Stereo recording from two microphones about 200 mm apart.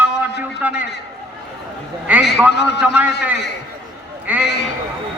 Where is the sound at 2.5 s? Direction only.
55° left (ahead or behind).